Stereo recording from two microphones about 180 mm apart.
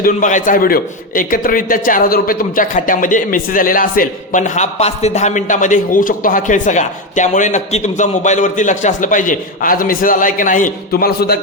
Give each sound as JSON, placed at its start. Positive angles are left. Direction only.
{"t": 0.0, "sound": "a man's voice", "side_deg": 45}